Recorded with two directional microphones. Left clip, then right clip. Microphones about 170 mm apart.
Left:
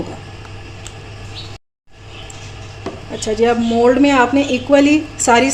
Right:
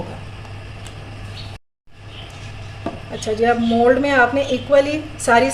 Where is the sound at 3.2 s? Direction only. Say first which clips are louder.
Left 2 dB; 40° left (ahead or behind).